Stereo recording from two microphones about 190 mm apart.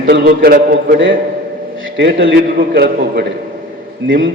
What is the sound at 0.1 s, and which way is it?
A man's voice, 55° right (ahead or behind).